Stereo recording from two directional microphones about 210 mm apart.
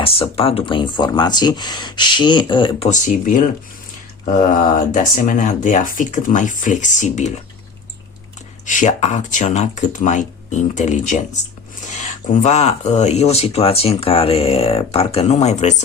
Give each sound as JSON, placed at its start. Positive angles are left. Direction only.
{"t": 0.0, "sound": "speech", "side_deg": 25}
{"t": 8.6, "sound": "speech", "side_deg": 35}